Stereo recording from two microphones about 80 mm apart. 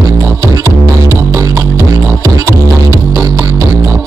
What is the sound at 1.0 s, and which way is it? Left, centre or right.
Music, right.